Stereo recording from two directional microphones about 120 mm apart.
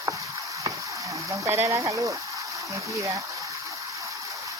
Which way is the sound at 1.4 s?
20° right (ahead or behind).